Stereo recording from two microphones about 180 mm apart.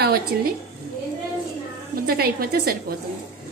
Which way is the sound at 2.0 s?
55° right (ahead or behind).